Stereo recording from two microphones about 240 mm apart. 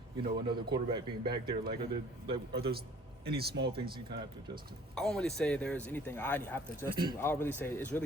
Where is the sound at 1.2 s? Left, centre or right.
Centre.